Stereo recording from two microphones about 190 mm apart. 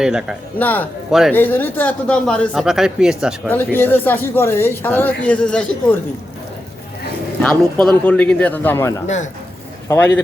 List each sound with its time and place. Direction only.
0.0 s speech: 5° right (ahead or behind)
0.6 s speech: 10° left (ahead or behind)
3.5 s speech: 10° left (ahead or behind)
7.4 s speech: 5° left (ahead or behind)
9.0 s speech: 40° left (ahead or behind)